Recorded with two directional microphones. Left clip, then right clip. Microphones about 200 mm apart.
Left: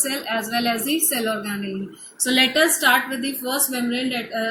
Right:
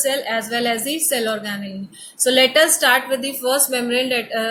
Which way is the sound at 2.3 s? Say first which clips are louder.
Right 3 dB; 25° right (ahead or behind).